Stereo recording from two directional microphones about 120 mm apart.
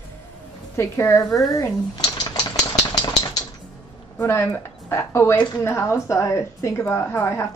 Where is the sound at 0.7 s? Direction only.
25° left (ahead or behind).